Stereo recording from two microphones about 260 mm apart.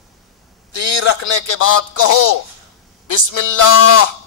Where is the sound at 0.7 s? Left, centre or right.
Left.